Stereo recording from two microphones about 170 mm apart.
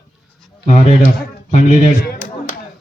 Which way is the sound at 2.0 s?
60° left (ahead or behind).